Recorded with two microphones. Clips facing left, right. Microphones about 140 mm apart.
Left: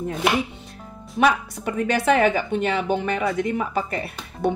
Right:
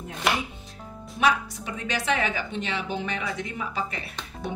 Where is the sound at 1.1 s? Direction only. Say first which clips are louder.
Left 4 dB; 50° left (ahead or behind).